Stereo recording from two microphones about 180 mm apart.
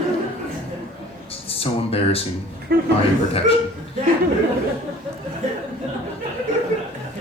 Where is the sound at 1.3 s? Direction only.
30° left (ahead or behind).